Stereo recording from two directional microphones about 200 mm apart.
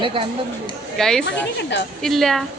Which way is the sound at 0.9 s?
Centre (ahead or behind).